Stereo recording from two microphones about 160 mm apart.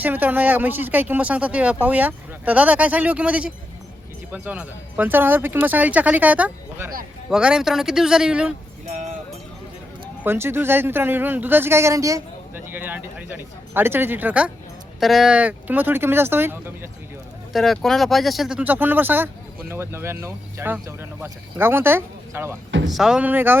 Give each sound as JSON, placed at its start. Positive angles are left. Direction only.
{"t": 0.0, "sound": "speech", "side_deg": -10}
{"t": 8.9, "sound": "cowbell", "side_deg": -45}
{"t": 10.2, "sound": "speech", "side_deg": -15}
{"t": 17.5, "sound": "speech", "side_deg": 0}
{"t": 22.9, "sound": "speech", "side_deg": 0}